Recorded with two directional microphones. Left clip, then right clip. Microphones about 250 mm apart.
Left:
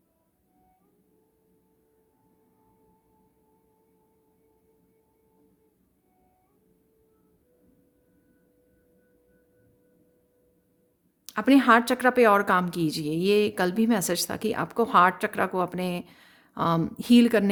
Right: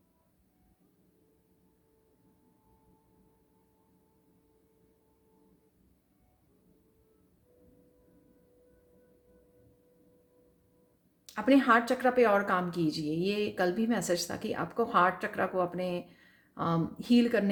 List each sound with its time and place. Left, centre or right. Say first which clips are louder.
11.3 s a woman's voice: left 5 dB; left